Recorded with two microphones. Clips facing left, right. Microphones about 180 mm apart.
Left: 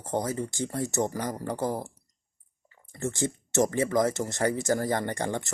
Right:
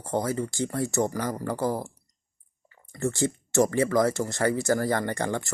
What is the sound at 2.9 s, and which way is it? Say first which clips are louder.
Speech: right 3 dB; 20° left (ahead or behind).